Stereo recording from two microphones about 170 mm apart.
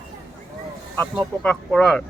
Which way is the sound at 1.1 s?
5° left (ahead or behind).